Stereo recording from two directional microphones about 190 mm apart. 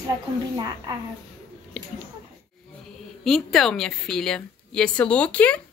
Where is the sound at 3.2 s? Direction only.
Centre (ahead or behind).